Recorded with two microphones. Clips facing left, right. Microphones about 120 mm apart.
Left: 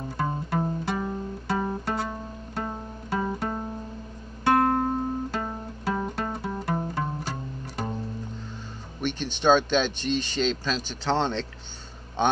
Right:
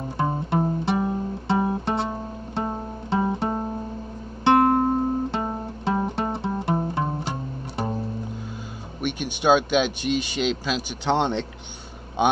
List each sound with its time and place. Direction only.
0.2 s music: 25° right (ahead or behind)
9.0 s a man's voice: 10° right (ahead or behind)